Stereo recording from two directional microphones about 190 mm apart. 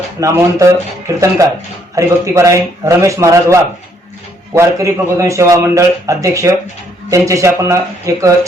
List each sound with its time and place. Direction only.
0.2 s a man's voice: 15° right (ahead or behind)